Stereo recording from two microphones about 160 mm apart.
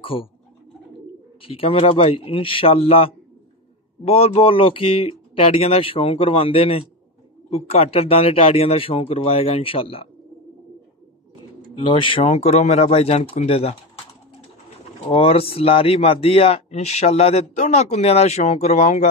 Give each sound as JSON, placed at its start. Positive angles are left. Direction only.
{"t": 0.0, "sound": "speech", "side_deg": 35}
{"t": 1.4, "sound": "speech", "side_deg": 35}
{"t": 11.8, "sound": "speech", "side_deg": 30}
{"t": 15.0, "sound": "speech", "side_deg": 40}